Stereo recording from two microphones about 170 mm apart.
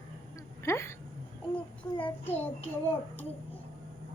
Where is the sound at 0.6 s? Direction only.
15° left (ahead or behind).